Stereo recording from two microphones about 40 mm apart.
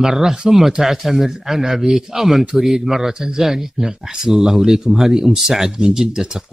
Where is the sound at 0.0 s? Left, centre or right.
Centre.